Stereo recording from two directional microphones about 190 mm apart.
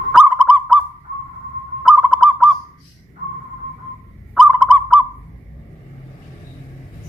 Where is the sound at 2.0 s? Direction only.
Centre (ahead or behind).